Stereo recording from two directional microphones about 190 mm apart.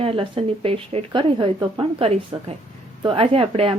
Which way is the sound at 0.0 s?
30° right (ahead or behind).